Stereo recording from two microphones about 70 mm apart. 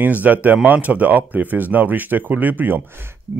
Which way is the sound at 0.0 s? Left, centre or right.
Right.